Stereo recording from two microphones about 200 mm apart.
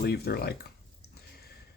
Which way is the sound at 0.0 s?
50° left (ahead or behind).